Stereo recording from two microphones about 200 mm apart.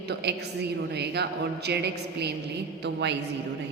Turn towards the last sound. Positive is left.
turn(degrees=-60)  # may be behind; listen again after turning